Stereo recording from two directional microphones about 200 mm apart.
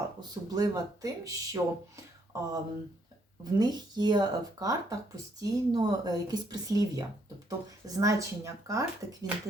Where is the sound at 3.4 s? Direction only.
20° right (ahead or behind).